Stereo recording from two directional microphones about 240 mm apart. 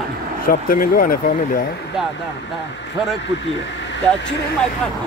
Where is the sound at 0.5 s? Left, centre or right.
Left.